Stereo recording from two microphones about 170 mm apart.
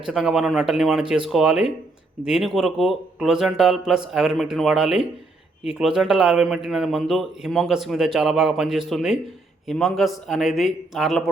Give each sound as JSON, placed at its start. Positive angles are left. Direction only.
{"t": 0.1, "sound": "a man's voice", "side_deg": -5}